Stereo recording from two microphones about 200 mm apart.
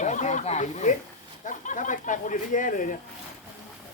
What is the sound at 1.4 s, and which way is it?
Speech, 40° left (ahead or behind).